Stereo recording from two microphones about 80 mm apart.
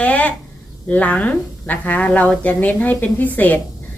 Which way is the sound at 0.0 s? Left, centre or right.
Centre.